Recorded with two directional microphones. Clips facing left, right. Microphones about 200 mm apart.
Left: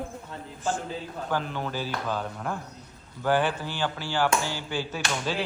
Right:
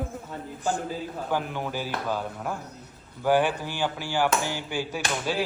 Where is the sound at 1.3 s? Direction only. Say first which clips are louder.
Even; 15° right (ahead or behind).